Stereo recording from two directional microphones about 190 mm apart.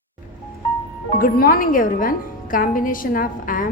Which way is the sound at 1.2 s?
50° left (ahead or behind).